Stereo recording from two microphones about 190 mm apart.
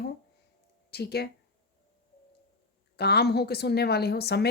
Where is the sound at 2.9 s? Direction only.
60° left (ahead or behind).